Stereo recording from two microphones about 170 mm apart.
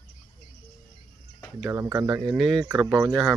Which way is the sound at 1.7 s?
15° right (ahead or behind).